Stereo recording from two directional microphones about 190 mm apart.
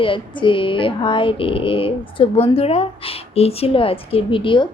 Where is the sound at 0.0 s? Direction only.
25° left (ahead or behind).